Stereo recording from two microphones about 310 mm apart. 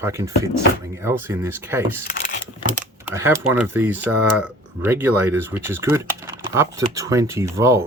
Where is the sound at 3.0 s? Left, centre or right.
Centre.